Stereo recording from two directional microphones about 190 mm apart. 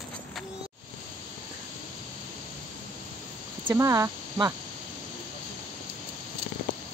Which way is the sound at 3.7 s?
15° right (ahead or behind).